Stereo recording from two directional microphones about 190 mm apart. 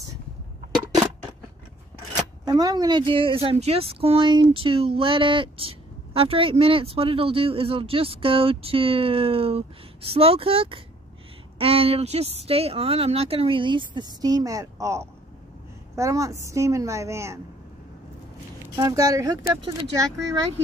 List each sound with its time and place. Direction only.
2.4 s a woman's voice: 20° right (ahead or behind)
18.8 s a woman's voice: 20° right (ahead or behind)